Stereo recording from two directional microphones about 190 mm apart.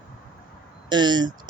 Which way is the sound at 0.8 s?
25° right (ahead or behind).